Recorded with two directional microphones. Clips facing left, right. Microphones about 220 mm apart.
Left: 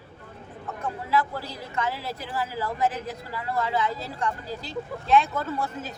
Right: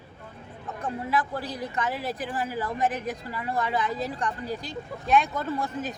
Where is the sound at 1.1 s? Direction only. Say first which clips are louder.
Left 3 dB; 15° right (ahead or behind).